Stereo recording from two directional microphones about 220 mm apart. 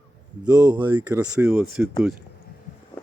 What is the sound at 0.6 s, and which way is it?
Speech, 10° right (ahead or behind).